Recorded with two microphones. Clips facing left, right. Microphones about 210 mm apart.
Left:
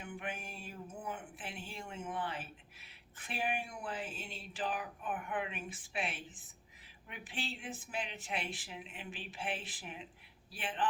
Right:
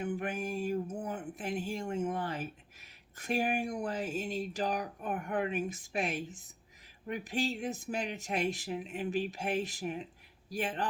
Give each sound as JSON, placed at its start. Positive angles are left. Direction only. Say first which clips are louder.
{"t": 0.0, "sound": "a man's voice", "louder": "right 9 dB", "side_deg": -40}